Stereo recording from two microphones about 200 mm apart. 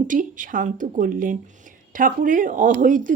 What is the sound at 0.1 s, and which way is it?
Speech, 40° right (ahead or behind).